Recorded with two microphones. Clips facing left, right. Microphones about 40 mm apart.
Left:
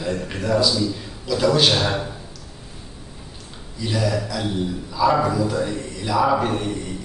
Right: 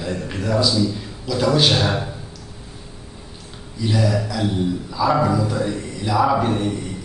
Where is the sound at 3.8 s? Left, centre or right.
Centre.